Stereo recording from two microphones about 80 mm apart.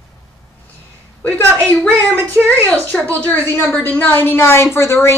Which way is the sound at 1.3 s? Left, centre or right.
Left.